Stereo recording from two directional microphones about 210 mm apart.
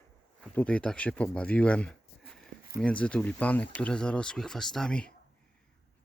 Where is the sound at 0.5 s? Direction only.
5° left (ahead or behind).